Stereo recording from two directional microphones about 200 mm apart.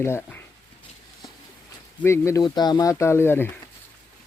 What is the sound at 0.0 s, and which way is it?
Speech, 10° left (ahead or behind).